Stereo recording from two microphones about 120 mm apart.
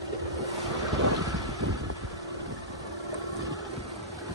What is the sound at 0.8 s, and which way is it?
Vehicle, 30° right (ahead or behind).